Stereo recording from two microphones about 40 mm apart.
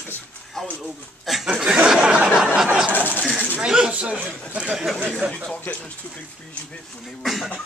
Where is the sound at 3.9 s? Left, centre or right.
Right.